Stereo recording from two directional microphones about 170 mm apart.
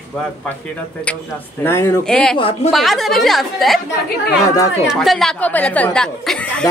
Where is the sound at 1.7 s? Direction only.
15° left (ahead or behind).